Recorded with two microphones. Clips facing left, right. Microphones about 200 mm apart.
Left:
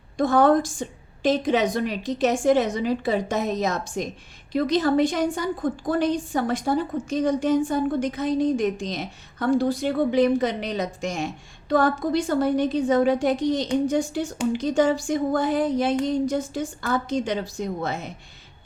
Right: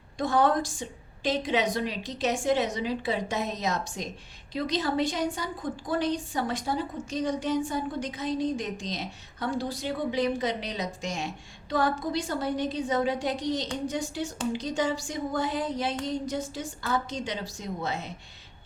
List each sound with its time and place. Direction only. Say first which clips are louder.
0.2 s a woman's voice: left 6 dB; 50° left (ahead or behind)